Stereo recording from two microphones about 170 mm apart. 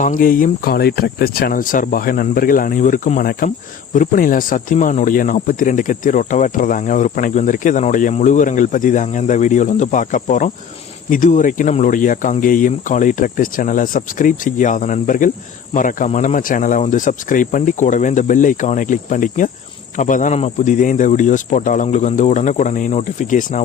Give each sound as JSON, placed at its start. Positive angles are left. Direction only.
{"t": 0.0, "sound": "speech", "side_deg": 55}